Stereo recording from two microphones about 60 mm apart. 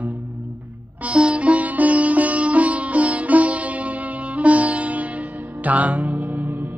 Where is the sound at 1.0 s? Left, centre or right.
Centre.